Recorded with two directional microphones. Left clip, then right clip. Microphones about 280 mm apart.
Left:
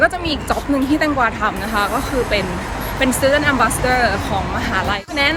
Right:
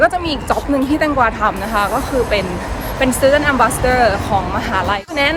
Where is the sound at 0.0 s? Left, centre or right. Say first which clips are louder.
Right 2 dB; centre.